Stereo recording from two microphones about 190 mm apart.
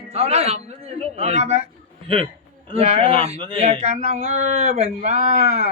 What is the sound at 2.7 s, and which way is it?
Speech, 30° right (ahead or behind).